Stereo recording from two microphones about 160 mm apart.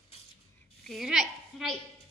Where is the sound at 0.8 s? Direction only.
Centre (ahead or behind).